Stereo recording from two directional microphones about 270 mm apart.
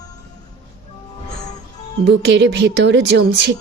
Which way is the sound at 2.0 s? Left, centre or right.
Right.